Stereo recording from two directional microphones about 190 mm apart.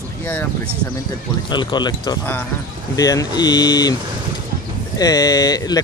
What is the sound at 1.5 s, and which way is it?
Speech, 25° left (ahead or behind).